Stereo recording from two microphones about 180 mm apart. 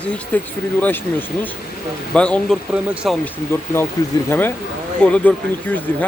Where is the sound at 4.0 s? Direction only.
20° left (ahead or behind).